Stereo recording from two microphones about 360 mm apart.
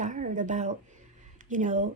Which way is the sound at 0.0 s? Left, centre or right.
Centre.